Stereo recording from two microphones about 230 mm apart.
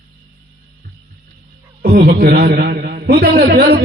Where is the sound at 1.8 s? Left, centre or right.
Right.